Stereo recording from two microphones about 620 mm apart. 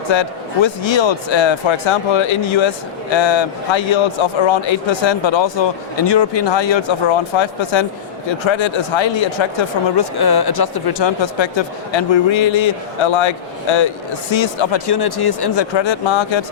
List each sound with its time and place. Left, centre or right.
0.1 s speech: left